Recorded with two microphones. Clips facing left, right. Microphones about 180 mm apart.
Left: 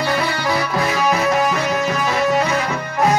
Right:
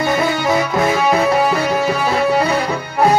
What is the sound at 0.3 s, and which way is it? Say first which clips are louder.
Music: right 4 dB; 20° right (ahead or behind).